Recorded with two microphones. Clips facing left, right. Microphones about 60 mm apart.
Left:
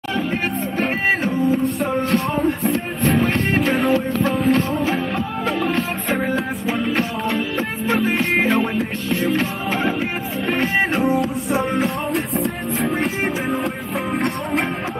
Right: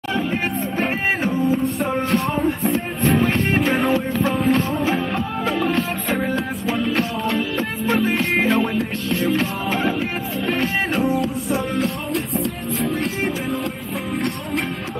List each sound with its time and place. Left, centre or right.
0.7 s music: centre; by 10.9 s left